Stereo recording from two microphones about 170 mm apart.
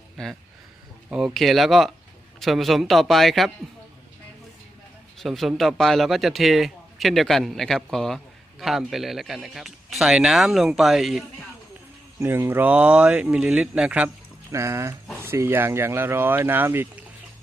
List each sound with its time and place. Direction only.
1.1 s a man's voice: centre (ahead or behind)
5.2 s a man's voice: centre (ahead or behind)
12.2 s speech: 15° right (ahead or behind)